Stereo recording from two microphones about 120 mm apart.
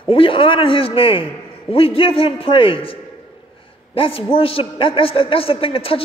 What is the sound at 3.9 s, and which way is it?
A man's voice, 50° left (ahead or behind).